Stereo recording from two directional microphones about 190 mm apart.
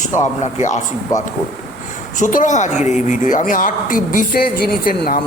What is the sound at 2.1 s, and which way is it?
A woman's voice, 40° left (ahead or behind).